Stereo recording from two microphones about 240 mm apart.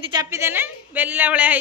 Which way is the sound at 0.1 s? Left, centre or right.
Centre.